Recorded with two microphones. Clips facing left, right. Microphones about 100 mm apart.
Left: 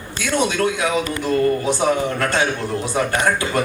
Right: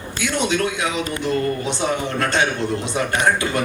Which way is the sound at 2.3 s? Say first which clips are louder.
Even; 20° right (ahead or behind).